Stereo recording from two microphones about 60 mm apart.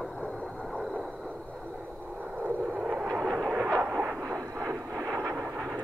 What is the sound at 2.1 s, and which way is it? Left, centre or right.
Vehicle, right.